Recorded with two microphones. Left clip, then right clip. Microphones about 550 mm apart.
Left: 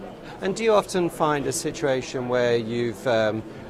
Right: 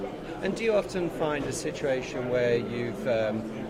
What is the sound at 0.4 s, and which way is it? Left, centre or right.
A man's voice, left.